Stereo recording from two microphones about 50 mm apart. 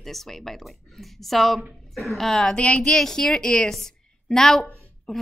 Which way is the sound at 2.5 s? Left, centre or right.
Left.